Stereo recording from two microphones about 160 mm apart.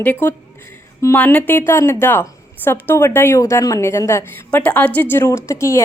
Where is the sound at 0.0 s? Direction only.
15° left (ahead or behind).